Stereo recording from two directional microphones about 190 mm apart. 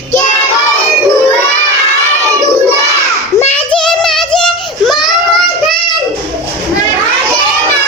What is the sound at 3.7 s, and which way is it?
Child singing, centre (ahead or behind).